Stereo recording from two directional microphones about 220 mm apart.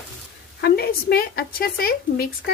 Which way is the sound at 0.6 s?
45° left (ahead or behind).